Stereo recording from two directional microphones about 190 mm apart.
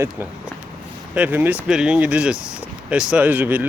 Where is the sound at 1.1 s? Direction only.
10° right (ahead or behind).